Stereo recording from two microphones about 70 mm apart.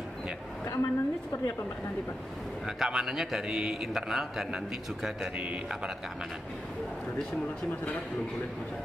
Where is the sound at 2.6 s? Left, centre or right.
Centre.